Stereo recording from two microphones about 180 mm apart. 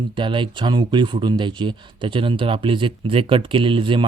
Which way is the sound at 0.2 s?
25° right (ahead or behind).